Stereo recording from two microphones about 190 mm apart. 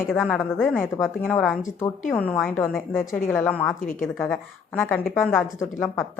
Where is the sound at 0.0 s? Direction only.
5° left (ahead or behind).